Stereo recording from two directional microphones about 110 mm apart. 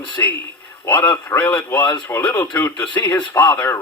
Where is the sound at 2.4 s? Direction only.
15° left (ahead or behind).